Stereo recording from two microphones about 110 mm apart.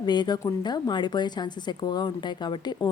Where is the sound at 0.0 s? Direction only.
40° left (ahead or behind).